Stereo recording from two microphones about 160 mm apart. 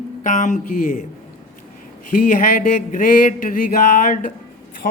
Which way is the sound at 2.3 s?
55° left (ahead or behind).